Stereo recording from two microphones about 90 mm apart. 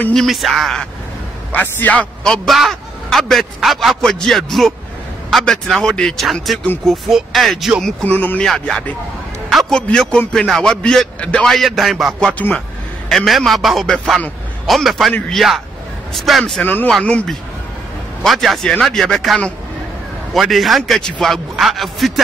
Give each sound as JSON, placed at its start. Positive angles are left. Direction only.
{"t": 0.1, "sound": "a man's voice", "side_deg": 0}
{"t": 1.5, "sound": "a man's voice", "side_deg": 20}
{"t": 7.8, "sound": "speech", "side_deg": 15}
{"t": 8.5, "sound": "speech", "side_deg": 5}
{"t": 9.5, "sound": "a sound", "side_deg": 0}
{"t": 9.8, "sound": "a man's voice", "side_deg": 10}
{"t": 12.3, "sound": "speech", "side_deg": 15}
{"t": 13.1, "sound": "a man's voice", "side_deg": 0}
{"t": 16.6, "sound": "speech", "side_deg": 20}
{"t": 18.2, "sound": "a man's voice", "side_deg": 0}